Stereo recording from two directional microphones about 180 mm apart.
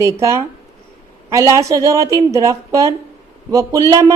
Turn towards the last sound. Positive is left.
turn(degrees=-20)  # may be behind; listen again after turning